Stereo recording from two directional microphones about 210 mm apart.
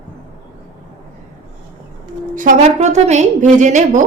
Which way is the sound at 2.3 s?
40° right (ahead or behind).